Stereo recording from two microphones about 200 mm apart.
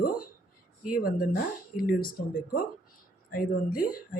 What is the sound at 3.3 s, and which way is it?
Speech, 45° left (ahead or behind).